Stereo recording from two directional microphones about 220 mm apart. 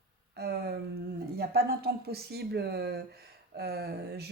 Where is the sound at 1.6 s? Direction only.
45° right (ahead or behind).